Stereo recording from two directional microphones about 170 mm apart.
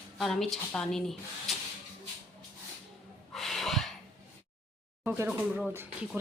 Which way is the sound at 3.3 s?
Centre (ahead or behind).